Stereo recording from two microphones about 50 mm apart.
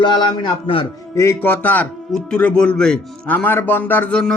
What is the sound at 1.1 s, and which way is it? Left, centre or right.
Speech, left.